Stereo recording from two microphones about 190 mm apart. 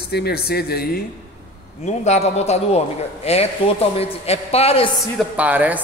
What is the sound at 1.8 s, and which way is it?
A man's voice, 35° left (ahead or behind).